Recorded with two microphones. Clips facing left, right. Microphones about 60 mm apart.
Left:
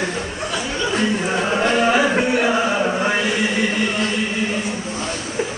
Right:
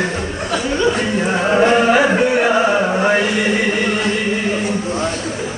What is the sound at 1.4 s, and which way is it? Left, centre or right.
Music, right.